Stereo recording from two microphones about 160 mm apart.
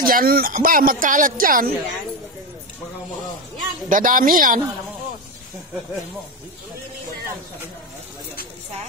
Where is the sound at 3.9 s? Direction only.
55° right (ahead or behind).